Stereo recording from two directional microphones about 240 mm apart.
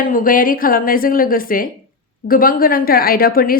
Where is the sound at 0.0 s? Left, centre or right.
Left.